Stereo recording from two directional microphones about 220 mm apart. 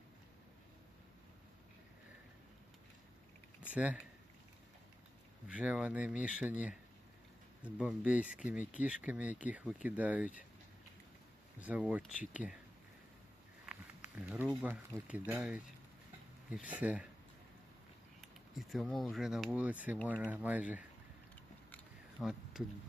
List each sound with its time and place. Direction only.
3.7 s speech: 5° right (ahead or behind)
5.5 s speech: 5° right (ahead or behind)
11.6 s speech: 5° right (ahead or behind)
14.2 s speech: 5° right (ahead or behind)
18.2 s speech: centre (ahead or behind)
22.2 s a sound: centre (ahead or behind)